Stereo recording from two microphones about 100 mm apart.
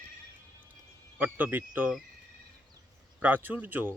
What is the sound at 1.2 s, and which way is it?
Speech, 20° right (ahead or behind).